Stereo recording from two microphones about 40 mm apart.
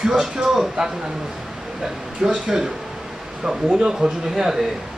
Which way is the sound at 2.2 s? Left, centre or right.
Centre.